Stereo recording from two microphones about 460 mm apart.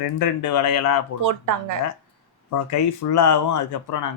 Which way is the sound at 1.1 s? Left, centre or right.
Right.